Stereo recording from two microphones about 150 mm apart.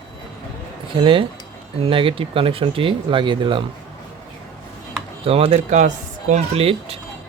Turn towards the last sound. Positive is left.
turn(degrees=-40)  # may be behind; listen again after turning